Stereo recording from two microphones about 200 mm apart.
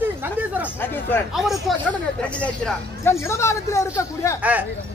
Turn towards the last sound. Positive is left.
turn(degrees=-5)  # may be behind; listen again after turning